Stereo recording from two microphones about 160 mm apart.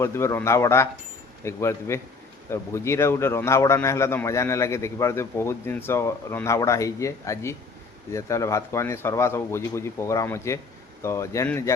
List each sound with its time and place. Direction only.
0.0 s a man's voice: 15° left (ahead or behind)